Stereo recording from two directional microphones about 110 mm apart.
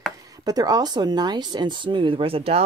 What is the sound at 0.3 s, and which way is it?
Speech, 35° right (ahead or behind).